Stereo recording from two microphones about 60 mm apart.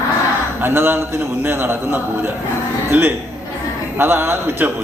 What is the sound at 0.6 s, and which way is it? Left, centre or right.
A man's voice, right.